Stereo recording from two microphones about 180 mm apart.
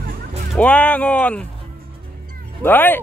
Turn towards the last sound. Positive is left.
turn(degrees=10)  # may be behind; listen again after turning